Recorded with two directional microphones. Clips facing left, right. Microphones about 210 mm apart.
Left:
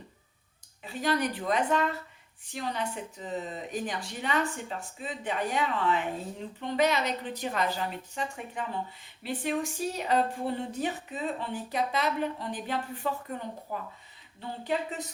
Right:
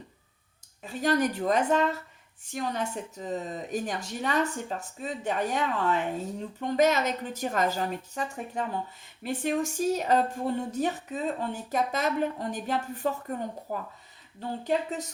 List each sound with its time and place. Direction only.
0.8 s speech: 45° right (ahead or behind)